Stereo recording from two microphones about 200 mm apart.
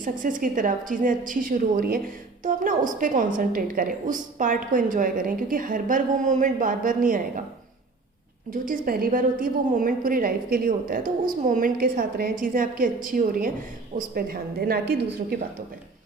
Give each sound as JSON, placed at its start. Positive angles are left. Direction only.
{"t": 0.0, "sound": "a woman's voice", "side_deg": -40}
{"t": 8.4, "sound": "a woman's voice", "side_deg": -45}